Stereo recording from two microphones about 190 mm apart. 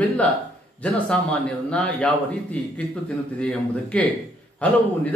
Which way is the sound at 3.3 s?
5° left (ahead or behind).